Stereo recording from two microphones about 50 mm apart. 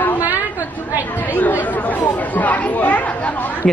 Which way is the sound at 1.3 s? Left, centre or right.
Left.